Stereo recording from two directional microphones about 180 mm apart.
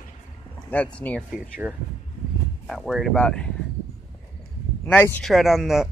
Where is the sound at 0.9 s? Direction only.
5° left (ahead or behind).